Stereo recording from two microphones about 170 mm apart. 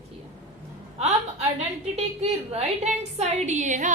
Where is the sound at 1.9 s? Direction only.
40° right (ahead or behind).